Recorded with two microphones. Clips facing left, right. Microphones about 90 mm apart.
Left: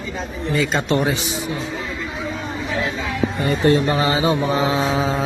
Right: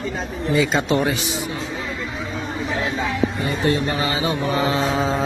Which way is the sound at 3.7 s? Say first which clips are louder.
Left 5 dB; 30° left (ahead or behind).